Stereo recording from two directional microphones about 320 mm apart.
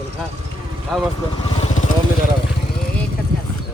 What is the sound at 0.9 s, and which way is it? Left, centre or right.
Speech, centre.